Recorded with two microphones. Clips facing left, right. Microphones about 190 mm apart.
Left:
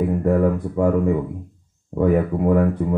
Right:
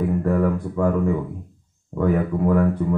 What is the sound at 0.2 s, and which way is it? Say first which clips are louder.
Speech: left 2 dB; 20° left (ahead or behind).